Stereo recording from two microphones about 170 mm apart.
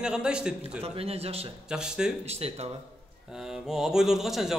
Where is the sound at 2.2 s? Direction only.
40° right (ahead or behind).